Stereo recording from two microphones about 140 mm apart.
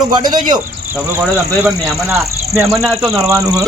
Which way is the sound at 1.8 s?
20° right (ahead or behind).